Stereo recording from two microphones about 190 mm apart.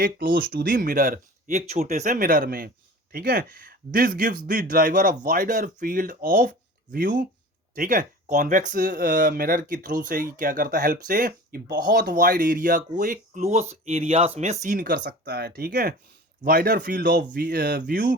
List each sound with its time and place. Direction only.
0.0 s speech: 60° right (ahead or behind)
7.8 s speech: 45° right (ahead or behind)